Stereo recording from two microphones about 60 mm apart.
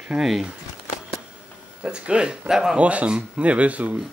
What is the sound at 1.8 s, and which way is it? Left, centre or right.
Speech, centre.